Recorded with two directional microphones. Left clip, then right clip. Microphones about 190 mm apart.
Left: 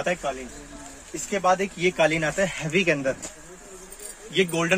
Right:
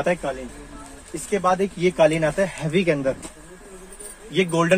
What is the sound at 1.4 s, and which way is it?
Speech, 15° right (ahead or behind).